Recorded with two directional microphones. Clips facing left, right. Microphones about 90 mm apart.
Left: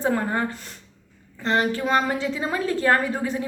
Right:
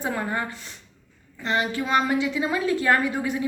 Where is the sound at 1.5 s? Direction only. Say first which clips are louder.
Left 3 dB; 40° left (ahead or behind).